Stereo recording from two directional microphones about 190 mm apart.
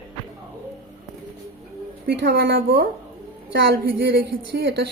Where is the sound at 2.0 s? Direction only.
60° right (ahead or behind).